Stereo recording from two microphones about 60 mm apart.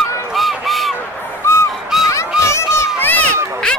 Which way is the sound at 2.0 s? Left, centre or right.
Left.